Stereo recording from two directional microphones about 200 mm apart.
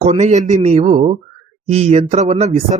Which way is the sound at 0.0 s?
35° right (ahead or behind).